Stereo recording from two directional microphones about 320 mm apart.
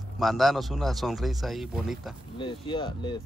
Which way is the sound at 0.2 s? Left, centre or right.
Centre.